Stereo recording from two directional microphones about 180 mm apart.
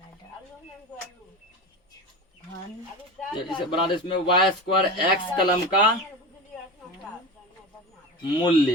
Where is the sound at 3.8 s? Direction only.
25° left (ahead or behind).